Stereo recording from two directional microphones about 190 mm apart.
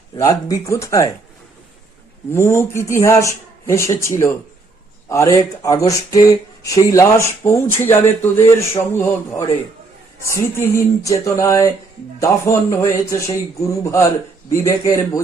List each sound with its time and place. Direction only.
0.2 s speech: 20° left (ahead or behind)
2.3 s speech: 15° left (ahead or behind)